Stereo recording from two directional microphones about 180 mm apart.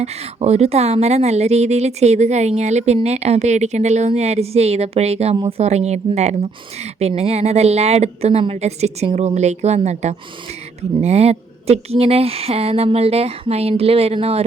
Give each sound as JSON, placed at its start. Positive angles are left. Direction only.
{"t": 0.0, "sound": "a woman's voice", "side_deg": -35}